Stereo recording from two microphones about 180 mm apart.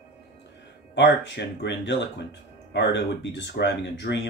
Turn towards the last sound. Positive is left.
turn(degrees=75)  # may be behind; listen again after turning